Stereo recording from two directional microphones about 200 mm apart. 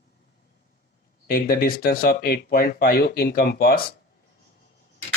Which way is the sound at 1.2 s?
50° left (ahead or behind).